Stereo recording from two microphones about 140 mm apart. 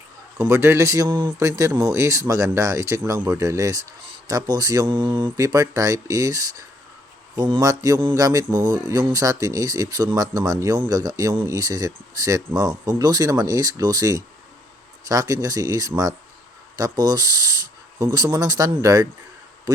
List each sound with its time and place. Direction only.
0.3 s speech: 20° right (ahead or behind); by 5.3 s 35° right (ahead or behind)
5.4 s speech: 25° right (ahead or behind)